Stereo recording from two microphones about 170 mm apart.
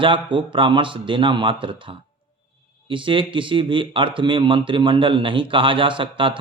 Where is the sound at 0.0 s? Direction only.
30° right (ahead or behind).